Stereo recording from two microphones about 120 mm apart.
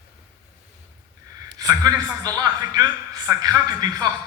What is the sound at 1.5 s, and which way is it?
A man's voice, 30° right (ahead or behind).